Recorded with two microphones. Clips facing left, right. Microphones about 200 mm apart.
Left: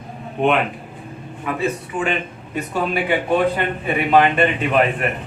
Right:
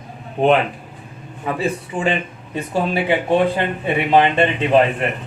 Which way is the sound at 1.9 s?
30° right (ahead or behind).